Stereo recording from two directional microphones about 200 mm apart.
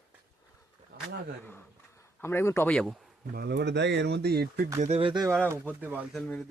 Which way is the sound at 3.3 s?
55° right (ahead or behind).